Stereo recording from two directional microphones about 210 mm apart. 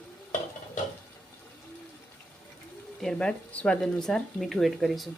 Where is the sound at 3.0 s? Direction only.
5° left (ahead or behind).